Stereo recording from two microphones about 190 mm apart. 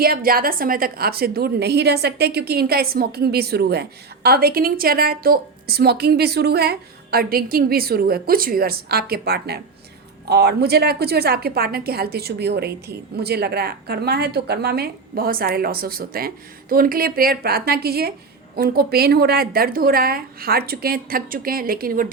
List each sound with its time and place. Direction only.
0.0 s a woman's voice: 50° right (ahead or behind)